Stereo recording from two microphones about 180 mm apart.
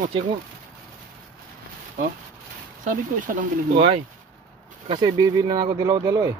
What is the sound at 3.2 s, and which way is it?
Speech, 45° right (ahead or behind).